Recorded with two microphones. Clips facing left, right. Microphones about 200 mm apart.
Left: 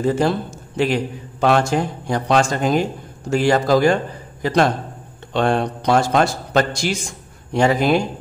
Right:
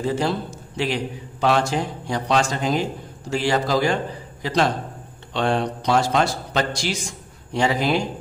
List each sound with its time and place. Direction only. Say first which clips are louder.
0.0 s a man's voice: left 4 dB; 50° left (ahead or behind)